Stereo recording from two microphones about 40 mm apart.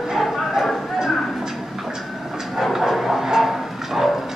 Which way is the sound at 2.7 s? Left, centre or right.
Centre.